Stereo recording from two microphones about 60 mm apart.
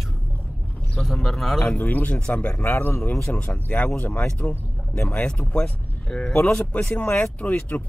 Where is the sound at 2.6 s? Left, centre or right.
Left.